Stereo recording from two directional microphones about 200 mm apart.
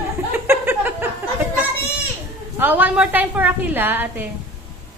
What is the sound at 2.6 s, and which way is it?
A woman's voice, 10° right (ahead or behind).